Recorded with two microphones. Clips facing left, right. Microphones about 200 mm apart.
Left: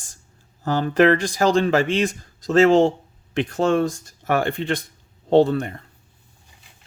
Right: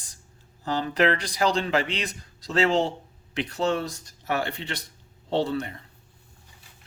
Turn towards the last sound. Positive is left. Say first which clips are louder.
# left 9 dB
turn(degrees=50)  # may be behind; listen again after turning